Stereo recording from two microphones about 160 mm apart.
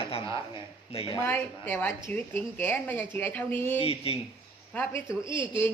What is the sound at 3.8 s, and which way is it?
Speech, 35° left (ahead or behind).